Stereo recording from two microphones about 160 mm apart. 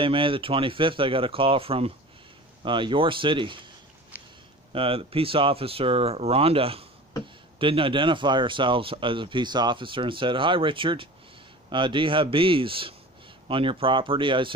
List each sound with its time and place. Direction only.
0.0 s speech: 30° right (ahead or behind)
4.7 s speech: 35° right (ahead or behind)